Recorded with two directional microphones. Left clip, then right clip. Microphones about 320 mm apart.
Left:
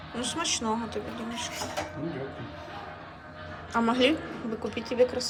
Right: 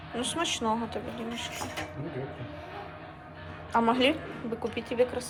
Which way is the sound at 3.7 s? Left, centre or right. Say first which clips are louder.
Even; centre.